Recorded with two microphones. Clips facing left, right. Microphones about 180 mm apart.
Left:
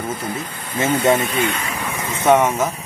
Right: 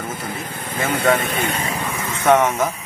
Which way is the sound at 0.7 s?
25° left (ahead or behind).